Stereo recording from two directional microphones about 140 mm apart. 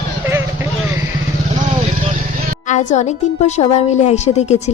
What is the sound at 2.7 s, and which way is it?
Speech, 60° left (ahead or behind).